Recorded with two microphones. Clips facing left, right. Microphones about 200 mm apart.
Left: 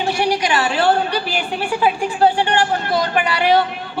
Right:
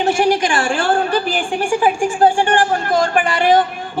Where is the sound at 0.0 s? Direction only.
45° right (ahead or behind).